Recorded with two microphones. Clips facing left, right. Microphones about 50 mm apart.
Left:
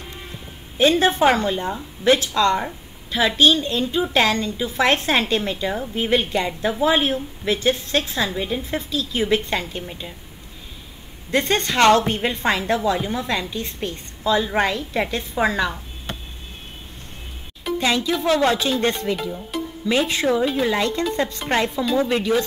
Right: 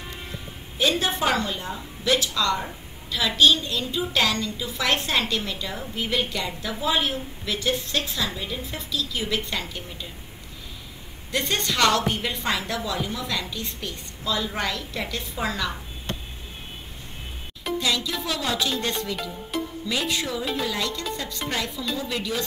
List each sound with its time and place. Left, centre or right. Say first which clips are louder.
0.7 s a woman's voice: left 7 dB; left
11.3 s a woman's voice: left 6 dB; left
17.7 s a woman's voice: left 6 dB; left
19.5 s music: even; centre
19.9 s a woman's voice: left 9 dB; left